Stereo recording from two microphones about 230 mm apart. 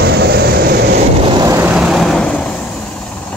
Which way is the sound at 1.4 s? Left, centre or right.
Centre.